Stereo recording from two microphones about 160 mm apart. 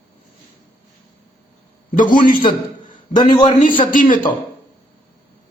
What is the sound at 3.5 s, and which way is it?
Speech, 55° left (ahead or behind).